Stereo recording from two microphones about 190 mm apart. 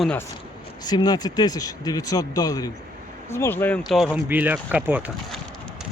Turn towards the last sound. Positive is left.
turn(degrees=-10)  # may be behind; listen again after turning